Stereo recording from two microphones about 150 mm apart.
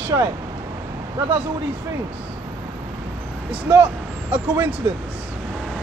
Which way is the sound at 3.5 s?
10° right (ahead or behind).